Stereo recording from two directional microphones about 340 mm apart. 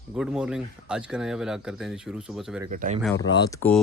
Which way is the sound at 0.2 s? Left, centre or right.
Centre.